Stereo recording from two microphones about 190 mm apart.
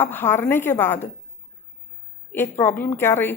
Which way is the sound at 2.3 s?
10° left (ahead or behind).